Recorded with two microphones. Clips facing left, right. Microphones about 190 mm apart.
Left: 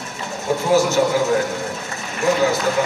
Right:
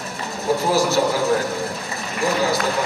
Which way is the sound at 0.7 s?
35° right (ahead or behind).